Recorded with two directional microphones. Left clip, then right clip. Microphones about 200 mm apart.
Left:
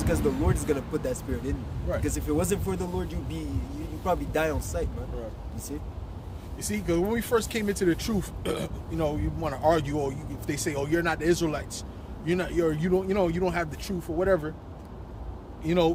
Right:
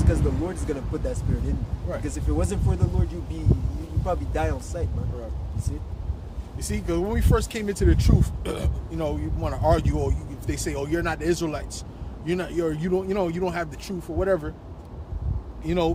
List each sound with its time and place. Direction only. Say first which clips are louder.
0.0 s speech: left 1 dB; 40° left (ahead or behind)
4.0 s speech: left 1 dB; 40° left (ahead or behind)
6.6 s speech: even; 5° right (ahead or behind)
15.6 s speech: even; 5° right (ahead or behind)